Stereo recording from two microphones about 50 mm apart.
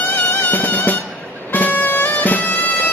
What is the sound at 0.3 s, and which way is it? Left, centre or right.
Music, left.